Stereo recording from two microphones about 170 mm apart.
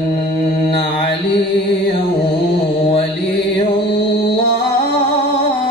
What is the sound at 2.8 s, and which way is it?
Mantra, 35° left (ahead or behind).